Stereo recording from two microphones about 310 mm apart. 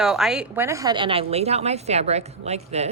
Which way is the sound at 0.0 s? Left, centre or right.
Centre.